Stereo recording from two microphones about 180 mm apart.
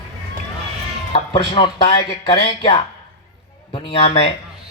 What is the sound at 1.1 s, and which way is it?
A man's voice, 30° left (ahead or behind).